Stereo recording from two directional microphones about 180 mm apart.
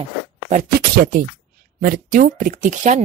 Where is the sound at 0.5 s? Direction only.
50° right (ahead or behind).